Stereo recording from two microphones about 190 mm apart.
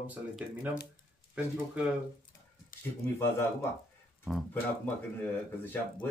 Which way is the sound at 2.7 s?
45° left (ahead or behind).